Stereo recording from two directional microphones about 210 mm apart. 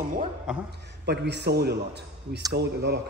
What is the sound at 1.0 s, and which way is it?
A man's voice, 50° right (ahead or behind).